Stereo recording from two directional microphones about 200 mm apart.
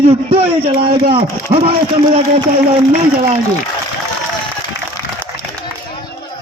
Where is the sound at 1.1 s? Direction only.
30° right (ahead or behind).